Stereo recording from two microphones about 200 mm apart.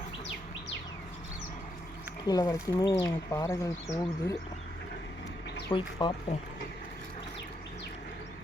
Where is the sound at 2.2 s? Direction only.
20° left (ahead or behind).